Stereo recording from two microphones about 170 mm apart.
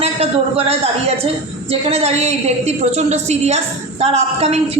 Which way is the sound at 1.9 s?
35° right (ahead or behind).